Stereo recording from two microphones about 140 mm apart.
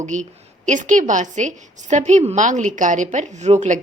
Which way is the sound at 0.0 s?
60° right (ahead or behind).